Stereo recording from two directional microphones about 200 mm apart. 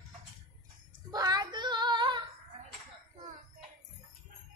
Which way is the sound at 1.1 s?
20° right (ahead or behind).